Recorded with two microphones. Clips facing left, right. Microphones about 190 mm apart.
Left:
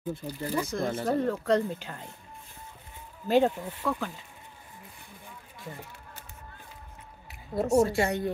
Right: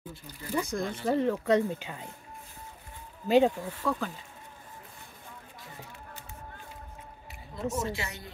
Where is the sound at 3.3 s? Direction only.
Centre (ahead or behind).